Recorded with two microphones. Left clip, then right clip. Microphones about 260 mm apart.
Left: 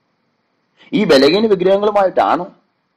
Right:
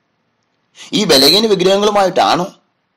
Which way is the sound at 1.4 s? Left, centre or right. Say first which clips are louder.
Right 1 dB; right.